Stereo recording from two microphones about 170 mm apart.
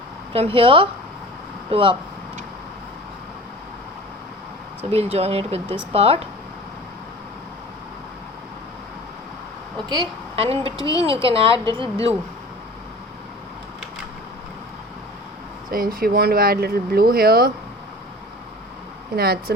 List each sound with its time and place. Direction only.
0.3 s speech: 35° right (ahead or behind)
4.8 s speech: 35° right (ahead or behind)
9.9 s a woman's voice: 30° right (ahead or behind)
10.7 s a woman's voice: 20° left (ahead or behind)
11.0 s speech: 30° right (ahead or behind)
15.7 s speech: 60° right (ahead or behind)
19.1 s speech: 65° right (ahead or behind)